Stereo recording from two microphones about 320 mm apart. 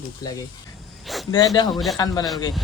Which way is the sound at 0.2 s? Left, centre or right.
Centre.